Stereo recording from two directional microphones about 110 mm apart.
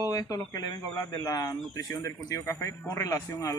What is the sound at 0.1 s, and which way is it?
Speech, 30° left (ahead or behind).